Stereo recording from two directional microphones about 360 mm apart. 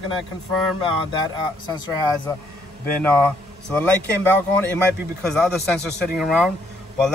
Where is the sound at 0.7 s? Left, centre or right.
Centre.